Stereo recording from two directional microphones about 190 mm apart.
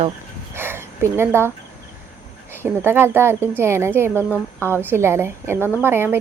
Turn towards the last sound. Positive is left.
turn(degrees=-10)  # may be behind; listen again after turning